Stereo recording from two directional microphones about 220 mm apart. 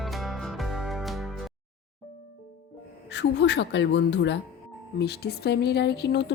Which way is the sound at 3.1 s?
50° left (ahead or behind).